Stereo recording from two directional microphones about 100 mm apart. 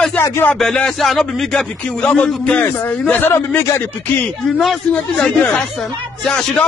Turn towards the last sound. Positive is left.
turn(degrees=5)  # may be behind; listen again after turning